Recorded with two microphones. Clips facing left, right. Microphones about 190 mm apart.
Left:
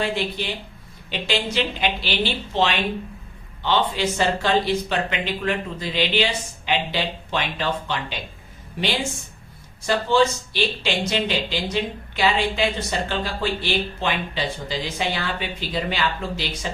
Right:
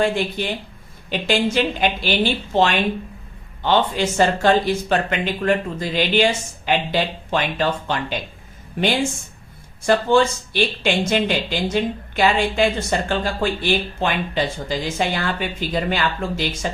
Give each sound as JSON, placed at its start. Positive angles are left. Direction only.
{"t": 0.0, "sound": "speech", "side_deg": -50}
{"t": 9.8, "sound": "speech", "side_deg": -50}